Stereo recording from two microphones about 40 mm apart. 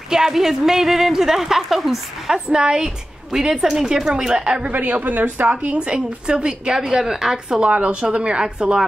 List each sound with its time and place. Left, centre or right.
0.1 s speech: centre
4.7 s a woman's voice: right
5.5 s a woman's voice: right